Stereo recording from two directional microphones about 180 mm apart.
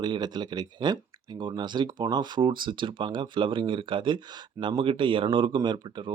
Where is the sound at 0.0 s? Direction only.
25° right (ahead or behind).